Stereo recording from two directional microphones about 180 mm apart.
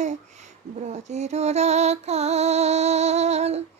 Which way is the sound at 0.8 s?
40° right (ahead or behind).